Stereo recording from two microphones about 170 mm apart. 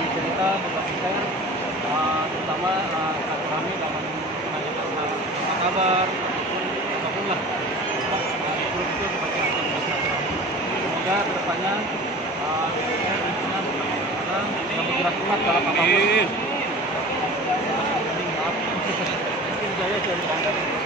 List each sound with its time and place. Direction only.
15.9 s speech: 80° left